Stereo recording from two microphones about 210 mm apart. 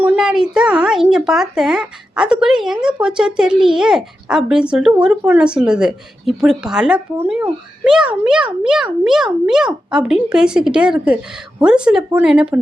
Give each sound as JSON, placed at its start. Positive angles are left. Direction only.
{"t": 0.0, "sound": "speech", "side_deg": -5}